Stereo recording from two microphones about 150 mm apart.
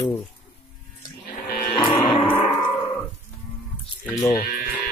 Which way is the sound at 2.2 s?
15° left (ahead or behind).